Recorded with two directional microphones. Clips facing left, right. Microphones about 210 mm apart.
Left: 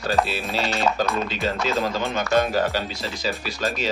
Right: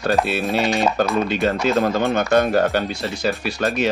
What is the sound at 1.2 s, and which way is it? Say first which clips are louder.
Speech: right 6 dB; 55° right (ahead or behind).